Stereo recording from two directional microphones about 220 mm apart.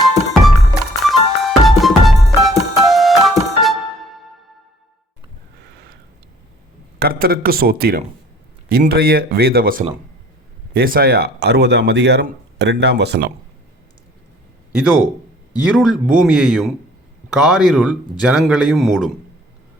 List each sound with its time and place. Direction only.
0.1 s music: centre (ahead or behind)
7.0 s speech: 45° right (ahead or behind)
15.7 s speech: centre (ahead or behind)